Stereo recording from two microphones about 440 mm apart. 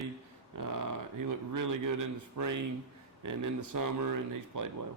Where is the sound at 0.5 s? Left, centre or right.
Right.